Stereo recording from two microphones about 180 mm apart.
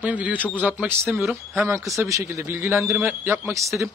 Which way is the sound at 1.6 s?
15° right (ahead or behind).